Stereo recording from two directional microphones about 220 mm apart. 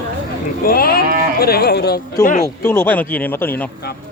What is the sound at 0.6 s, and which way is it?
Speech, 40° left (ahead or behind).